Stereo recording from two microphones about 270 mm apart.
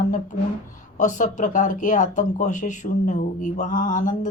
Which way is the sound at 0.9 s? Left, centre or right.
Left.